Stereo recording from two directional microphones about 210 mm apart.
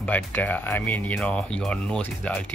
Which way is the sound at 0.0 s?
10° left (ahead or behind).